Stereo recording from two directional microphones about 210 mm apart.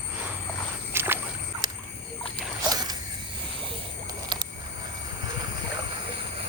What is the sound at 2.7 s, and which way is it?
Mechanisms, 20° right (ahead or behind).